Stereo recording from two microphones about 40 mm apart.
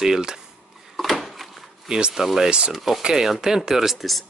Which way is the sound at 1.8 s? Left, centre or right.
Right.